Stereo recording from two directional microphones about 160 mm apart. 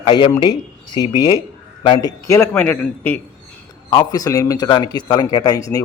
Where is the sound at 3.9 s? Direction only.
25° left (ahead or behind).